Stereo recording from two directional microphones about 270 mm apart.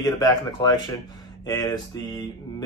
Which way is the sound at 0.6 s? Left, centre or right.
Centre.